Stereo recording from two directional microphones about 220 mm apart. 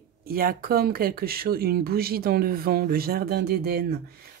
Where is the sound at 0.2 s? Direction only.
40° right (ahead or behind).